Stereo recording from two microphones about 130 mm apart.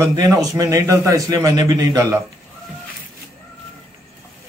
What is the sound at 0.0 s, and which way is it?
Speech, 25° right (ahead or behind).